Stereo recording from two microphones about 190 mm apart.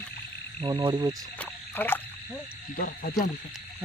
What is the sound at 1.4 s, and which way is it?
Frog, 10° left (ahead or behind).